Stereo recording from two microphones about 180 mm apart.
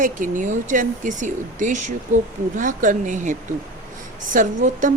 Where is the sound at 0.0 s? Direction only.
45° right (ahead or behind).